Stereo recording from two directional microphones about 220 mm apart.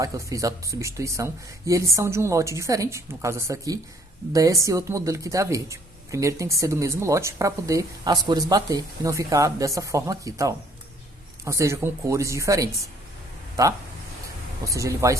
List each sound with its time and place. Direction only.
0.0 s speech: 15° right (ahead or behind)